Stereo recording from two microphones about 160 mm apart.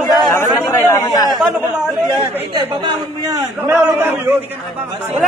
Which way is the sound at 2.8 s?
25° right (ahead or behind).